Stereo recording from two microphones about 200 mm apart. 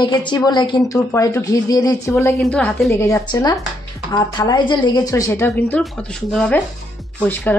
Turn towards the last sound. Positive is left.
turn(degrees=10)  # may be behind; listen again after turning